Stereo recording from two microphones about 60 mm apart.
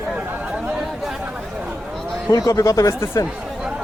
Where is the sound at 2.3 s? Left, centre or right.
Left.